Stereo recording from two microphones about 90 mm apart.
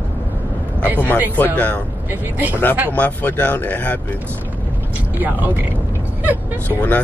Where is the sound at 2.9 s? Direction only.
20° left (ahead or behind).